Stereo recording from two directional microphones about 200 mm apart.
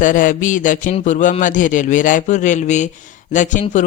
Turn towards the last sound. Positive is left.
turn(degrees=40)  # may be behind; listen again after turning